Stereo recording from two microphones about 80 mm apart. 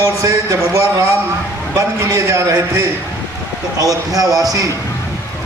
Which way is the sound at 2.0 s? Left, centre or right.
Right.